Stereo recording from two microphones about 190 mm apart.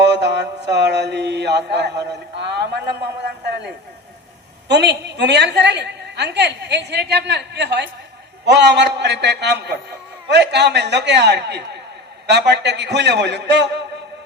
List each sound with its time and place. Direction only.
0.1 s mantra: 65° right (ahead or behind)
2.4 s a woman's voice: 65° right (ahead or behind)
4.7 s a woman's voice: 60° right (ahead or behind)